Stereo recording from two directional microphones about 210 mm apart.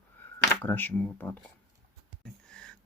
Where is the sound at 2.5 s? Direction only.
5° left (ahead or behind).